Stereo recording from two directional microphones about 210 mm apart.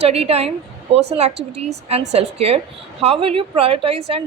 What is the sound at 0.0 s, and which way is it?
A woman's voice, 30° right (ahead or behind).